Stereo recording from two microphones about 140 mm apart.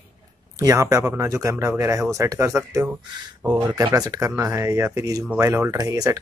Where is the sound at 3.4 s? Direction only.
10° right (ahead or behind).